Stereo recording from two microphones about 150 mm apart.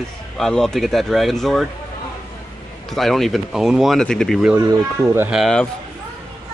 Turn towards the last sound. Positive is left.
turn(degrees=0)  # may be behind; listen again after turning